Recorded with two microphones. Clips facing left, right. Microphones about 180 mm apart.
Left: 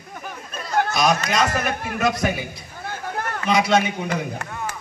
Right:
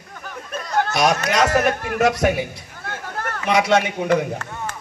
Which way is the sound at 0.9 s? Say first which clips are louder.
Right 3 dB; 70° right (ahead or behind).